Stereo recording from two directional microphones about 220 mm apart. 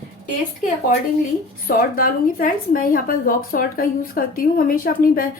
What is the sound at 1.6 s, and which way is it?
A woman's voice, 40° left (ahead or behind).